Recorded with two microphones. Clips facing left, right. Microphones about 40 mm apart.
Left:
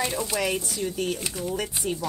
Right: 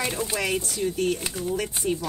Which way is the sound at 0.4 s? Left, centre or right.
Centre.